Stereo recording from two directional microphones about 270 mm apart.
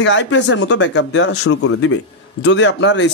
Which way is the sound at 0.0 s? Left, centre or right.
Left.